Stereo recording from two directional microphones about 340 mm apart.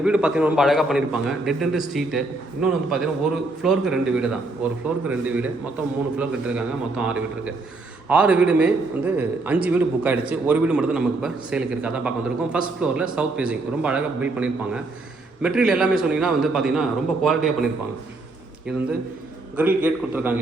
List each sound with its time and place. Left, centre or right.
0.0 s a man's voice: centre
19.5 s a man's voice: centre